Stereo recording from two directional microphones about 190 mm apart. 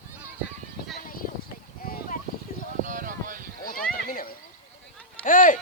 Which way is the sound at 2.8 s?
45° right (ahead or behind).